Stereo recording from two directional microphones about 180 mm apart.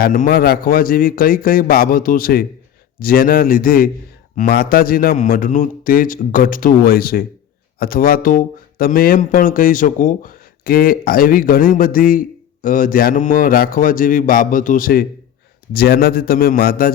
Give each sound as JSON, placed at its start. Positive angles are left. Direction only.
{"t": 0.0, "sound": "a man's voice", "side_deg": 50}